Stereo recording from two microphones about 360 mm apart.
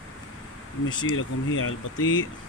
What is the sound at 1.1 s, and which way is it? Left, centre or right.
Speech, left.